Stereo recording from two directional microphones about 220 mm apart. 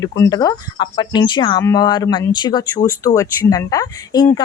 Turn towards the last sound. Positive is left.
turn(degrees=15)  # may be behind; listen again after turning